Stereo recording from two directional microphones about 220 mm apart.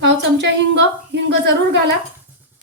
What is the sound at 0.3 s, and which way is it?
A woman's voice, 55° right (ahead or behind).